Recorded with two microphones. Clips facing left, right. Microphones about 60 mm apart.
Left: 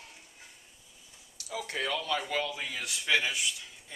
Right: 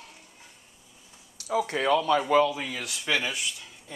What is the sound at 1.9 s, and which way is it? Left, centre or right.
Speech, right.